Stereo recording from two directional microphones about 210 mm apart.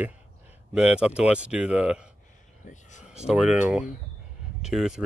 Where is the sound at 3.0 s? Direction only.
5° right (ahead or behind).